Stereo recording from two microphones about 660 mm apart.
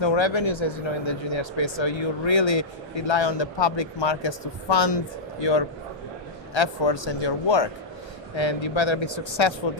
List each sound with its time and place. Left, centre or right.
0.0 s speech: left